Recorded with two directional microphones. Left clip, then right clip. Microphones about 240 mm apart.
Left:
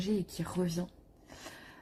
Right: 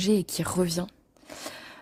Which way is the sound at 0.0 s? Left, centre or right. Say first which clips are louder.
Right 10 dB; right.